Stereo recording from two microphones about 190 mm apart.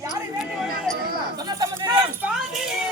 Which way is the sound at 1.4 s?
20° right (ahead or behind).